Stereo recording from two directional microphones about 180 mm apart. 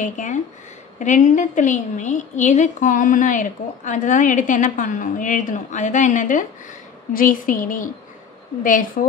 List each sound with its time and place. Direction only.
0.0 s a woman's voice: 45° left (ahead or behind)